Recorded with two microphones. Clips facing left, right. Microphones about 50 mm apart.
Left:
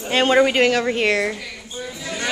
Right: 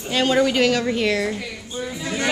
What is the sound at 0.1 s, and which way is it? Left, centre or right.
Speech, left.